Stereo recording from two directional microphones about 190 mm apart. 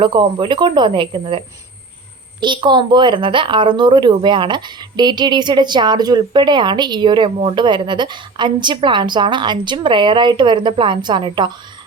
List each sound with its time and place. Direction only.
0.0 s speech: 25° right (ahead or behind)